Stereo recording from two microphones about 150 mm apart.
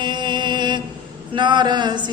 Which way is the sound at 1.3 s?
30° right (ahead or behind).